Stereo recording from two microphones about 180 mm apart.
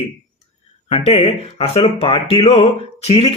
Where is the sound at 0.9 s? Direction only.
35° left (ahead or behind).